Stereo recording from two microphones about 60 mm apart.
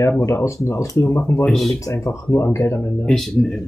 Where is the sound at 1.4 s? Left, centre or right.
Centre.